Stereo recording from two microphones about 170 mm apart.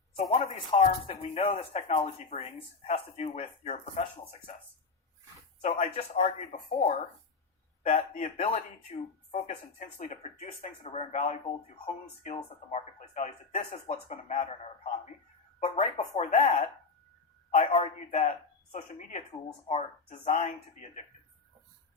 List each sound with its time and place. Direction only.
0.3 s speech: 30° left (ahead or behind)
5.6 s speech: 40° left (ahead or behind)